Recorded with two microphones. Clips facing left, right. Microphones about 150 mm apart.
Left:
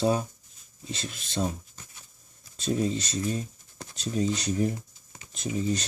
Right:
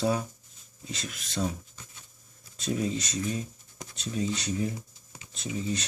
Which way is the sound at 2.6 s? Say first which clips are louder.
Left 2 dB; 35° left (ahead or behind).